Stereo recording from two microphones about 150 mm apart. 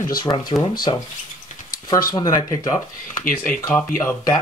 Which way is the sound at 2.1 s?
25° left (ahead or behind).